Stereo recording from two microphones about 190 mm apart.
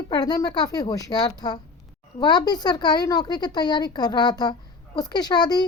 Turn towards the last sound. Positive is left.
turn(degrees=20)  # may be behind; listen again after turning